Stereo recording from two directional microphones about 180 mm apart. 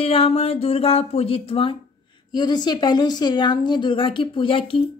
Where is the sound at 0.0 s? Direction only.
35° left (ahead or behind).